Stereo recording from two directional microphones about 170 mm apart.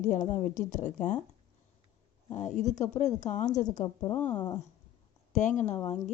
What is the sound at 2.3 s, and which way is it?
A woman's voice, 45° left (ahead or behind).